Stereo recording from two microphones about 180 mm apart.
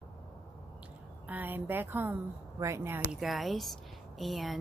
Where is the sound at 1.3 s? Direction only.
10° right (ahead or behind).